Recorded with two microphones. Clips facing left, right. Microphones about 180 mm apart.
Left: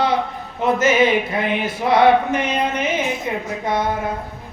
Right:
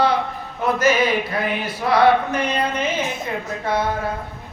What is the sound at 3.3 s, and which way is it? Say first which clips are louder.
Speech: left 2 dB; 15° left (ahead or behind).